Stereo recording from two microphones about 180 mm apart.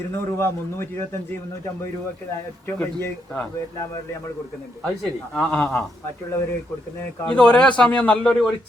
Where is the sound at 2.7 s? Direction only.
10° left (ahead or behind).